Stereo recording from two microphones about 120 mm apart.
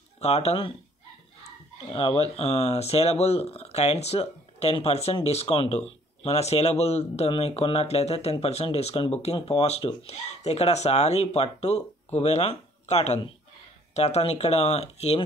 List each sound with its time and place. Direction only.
0.2 s speech: 60° left (ahead or behind)
1.9 s speech: 50° left (ahead or behind)
2.3 s speech: 60° left (ahead or behind)